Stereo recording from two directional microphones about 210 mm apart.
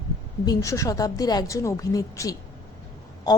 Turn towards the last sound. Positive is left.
turn(degrees=20)  # may be behind; listen again after turning